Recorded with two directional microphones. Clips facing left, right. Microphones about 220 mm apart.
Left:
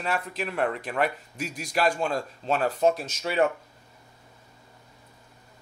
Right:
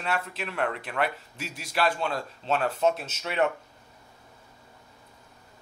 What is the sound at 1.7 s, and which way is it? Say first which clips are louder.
Speech: left 2 dB; 45° left (ahead or behind).